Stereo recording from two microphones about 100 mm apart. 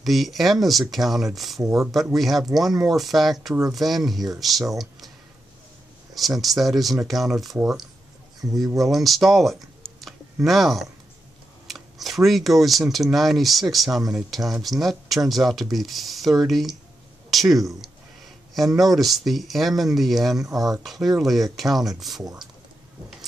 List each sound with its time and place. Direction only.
0.0 s speech: centre (ahead or behind)
1.6 s speech: 30° right (ahead or behind)
2.1 s speech: centre (ahead or behind)
6.1 s speech: centre (ahead or behind)
8.5 s speech: 35° right (ahead or behind)
8.7 s speech: centre (ahead or behind)